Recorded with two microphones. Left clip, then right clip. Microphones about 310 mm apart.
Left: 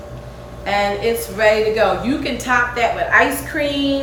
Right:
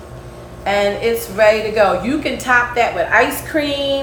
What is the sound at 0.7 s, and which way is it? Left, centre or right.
A woman's voice, centre.